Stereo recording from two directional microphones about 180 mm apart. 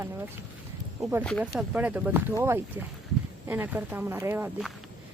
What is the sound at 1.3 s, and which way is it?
Speech, centre (ahead or behind).